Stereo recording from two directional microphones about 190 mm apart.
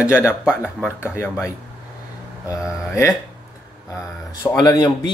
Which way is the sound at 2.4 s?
15° left (ahead or behind).